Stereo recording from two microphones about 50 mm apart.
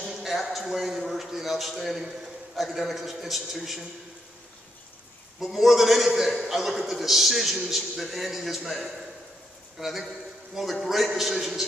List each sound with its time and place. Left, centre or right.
0.0 s a man's voice: centre
5.4 s a man's voice: centre